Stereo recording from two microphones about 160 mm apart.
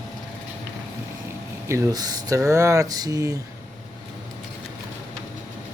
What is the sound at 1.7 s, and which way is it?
Speech, 20° right (ahead or behind).